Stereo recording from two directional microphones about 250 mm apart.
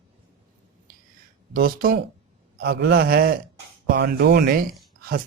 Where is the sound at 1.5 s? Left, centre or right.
Right.